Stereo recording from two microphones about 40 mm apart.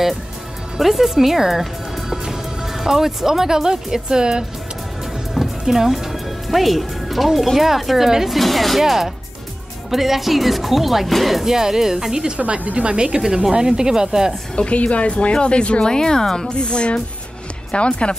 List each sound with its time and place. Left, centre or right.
0.7 s speech: centre
8.4 s speech: centre
11.4 s speech: centre
12.4 s a woman's voice: right; by 14.3 s centre
14.5 s a woman's voice: left